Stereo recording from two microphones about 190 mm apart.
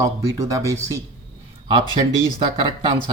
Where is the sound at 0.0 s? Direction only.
15° right (ahead or behind).